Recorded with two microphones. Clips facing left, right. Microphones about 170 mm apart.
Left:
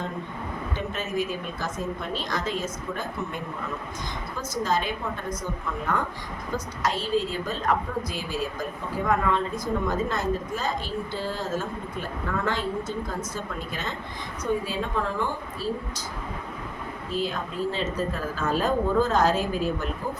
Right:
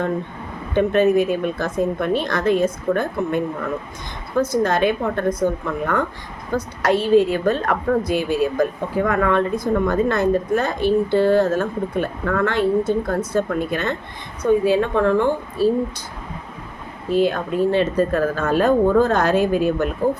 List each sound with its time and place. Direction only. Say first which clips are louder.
0.7 s a woman's voice: right 17 dB; 60° right (ahead or behind)
17.1 s a woman's voice: right 11 dB; 65° right (ahead or behind)